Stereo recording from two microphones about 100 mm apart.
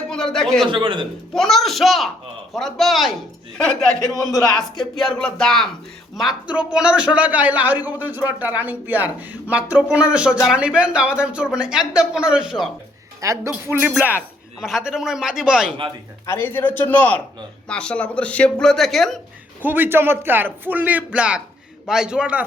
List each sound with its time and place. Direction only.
0.1 s a man's voice: 5° left (ahead or behind)
0.7 s a man's voice: 55° right (ahead or behind)
1.3 s a man's voice: 5° left (ahead or behind)
4.9 s a man's voice: 5° left (ahead or behind)
6.1 s speech: 5° right (ahead or behind)
13.2 s speech: 30° right (ahead or behind)
13.5 s a man's voice: 20° right (ahead or behind)
14.6 s a man's voice: 5° right (ahead or behind)
16.2 s speech: 25° left (ahead or behind); by 19.2 s centre (ahead or behind)
19.6 s a man's voice: 20° right (ahead or behind)